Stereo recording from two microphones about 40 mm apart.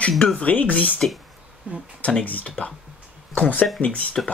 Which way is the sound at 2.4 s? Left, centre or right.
Left.